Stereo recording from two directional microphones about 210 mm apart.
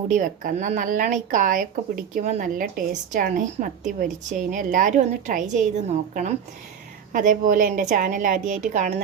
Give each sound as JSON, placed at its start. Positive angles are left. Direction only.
{"t": 0.1, "sound": "a woman's voice", "side_deg": -40}